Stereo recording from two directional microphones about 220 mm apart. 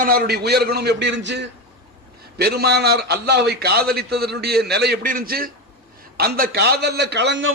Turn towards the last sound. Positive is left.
turn(degrees=-50)  # may be behind; listen again after turning